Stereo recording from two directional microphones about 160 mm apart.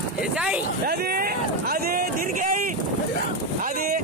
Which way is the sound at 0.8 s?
70° right (ahead or behind).